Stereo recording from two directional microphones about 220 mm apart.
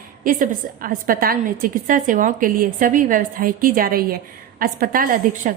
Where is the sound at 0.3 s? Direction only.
40° right (ahead or behind).